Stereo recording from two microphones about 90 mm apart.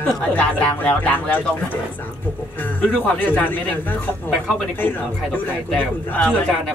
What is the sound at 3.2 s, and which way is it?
Speech, 20° left (ahead or behind).